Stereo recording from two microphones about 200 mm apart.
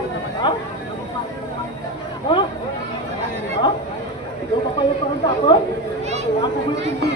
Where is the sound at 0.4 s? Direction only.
20° left (ahead or behind).